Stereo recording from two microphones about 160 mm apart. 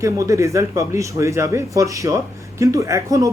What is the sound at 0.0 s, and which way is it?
Speech, 20° right (ahead or behind).